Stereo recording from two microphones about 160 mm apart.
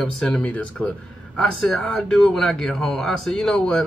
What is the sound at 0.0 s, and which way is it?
Speech, 5° left (ahead or behind).